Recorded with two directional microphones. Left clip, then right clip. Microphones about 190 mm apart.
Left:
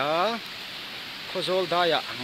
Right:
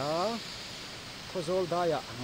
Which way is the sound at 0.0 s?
15° left (ahead or behind).